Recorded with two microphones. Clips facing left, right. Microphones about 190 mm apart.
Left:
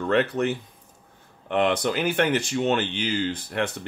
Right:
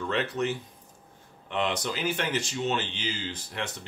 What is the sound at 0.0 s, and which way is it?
Speech, 55° left (ahead or behind).